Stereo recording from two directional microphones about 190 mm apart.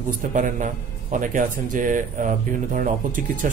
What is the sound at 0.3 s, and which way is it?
Speech, 40° right (ahead or behind).